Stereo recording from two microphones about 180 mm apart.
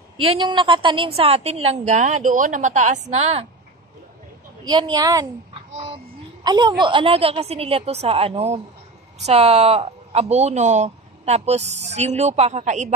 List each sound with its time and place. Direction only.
0.2 s speech: 30° right (ahead or behind)
4.6 s a woman's voice: 25° right (ahead or behind)
6.4 s a woman's voice: 25° right (ahead or behind); by 12.9 s 40° right (ahead or behind)